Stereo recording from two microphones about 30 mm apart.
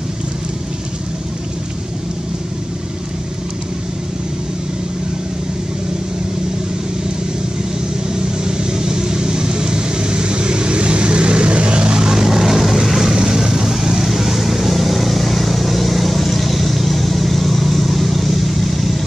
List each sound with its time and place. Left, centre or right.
8.1 s vehicle: right; by 13.1 s centre
13.1 s vehicle: right; by 18.9 s centre